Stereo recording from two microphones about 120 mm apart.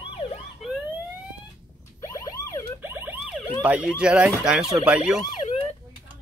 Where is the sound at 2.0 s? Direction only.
25° left (ahead or behind).